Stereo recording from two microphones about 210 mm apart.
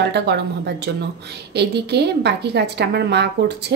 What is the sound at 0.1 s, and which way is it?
A woman's voice, 50° right (ahead or behind).